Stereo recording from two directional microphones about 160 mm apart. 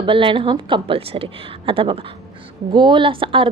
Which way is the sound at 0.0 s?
30° right (ahead or behind).